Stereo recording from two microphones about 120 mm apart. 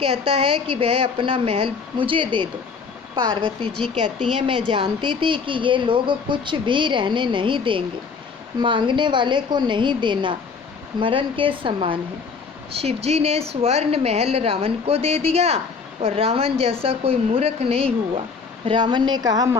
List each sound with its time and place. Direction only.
0.0 s a woman's voice: 50° right (ahead or behind)
12.8 s a woman's voice: 55° right (ahead or behind)
18.6 s a woman's voice: 40° right (ahead or behind)